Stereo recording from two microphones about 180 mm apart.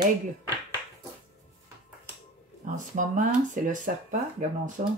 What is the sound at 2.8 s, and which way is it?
Speech, 45° right (ahead or behind).